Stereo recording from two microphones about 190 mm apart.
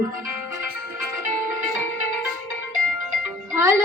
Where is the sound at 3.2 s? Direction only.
15° right (ahead or behind).